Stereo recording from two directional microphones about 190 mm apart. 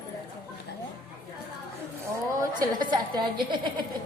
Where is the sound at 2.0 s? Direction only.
20° right (ahead or behind).